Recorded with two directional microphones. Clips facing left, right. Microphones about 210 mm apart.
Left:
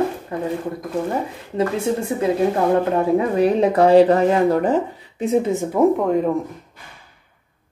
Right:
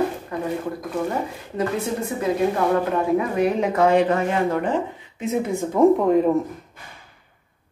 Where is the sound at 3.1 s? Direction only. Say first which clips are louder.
Left 4 dB; 35° left (ahead or behind).